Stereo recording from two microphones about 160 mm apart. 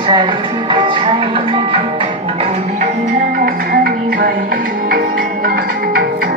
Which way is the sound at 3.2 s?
70° right (ahead or behind).